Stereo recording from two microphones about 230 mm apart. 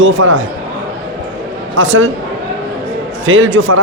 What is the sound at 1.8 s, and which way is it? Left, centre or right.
Speech, right.